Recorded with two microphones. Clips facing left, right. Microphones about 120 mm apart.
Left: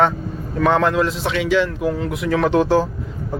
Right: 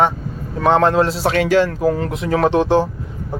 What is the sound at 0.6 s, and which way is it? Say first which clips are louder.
Speech: right 2 dB; 30° right (ahead or behind).